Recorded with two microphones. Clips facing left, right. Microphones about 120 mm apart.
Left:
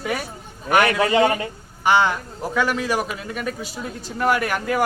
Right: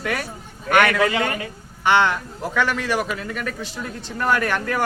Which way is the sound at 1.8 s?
10° left (ahead or behind).